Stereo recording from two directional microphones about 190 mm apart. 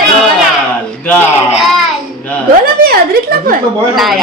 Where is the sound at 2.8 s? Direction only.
55° right (ahead or behind).